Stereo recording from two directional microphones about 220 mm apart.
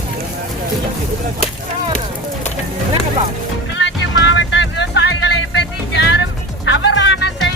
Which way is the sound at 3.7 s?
55° left (ahead or behind).